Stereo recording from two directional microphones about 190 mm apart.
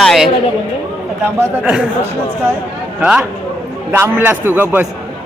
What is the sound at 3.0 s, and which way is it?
A man's voice, 5° right (ahead or behind).